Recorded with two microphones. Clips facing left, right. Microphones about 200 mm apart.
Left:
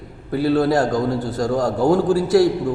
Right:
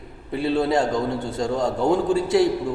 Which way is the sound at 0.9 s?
25° right (ahead or behind).